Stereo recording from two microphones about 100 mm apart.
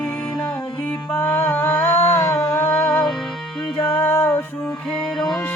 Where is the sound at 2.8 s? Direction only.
10° left (ahead or behind).